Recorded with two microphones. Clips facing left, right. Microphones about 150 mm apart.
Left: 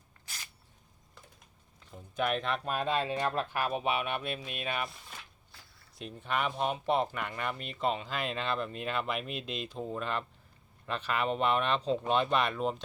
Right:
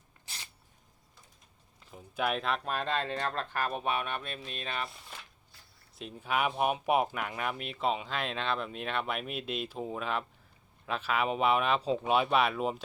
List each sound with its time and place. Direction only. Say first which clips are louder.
1.9 s speech: even; 5° right (ahead or behind)
5.5 s a sound: left 3 dB; 90° left
6.0 s speech: right 2 dB; 5° right (ahead or behind)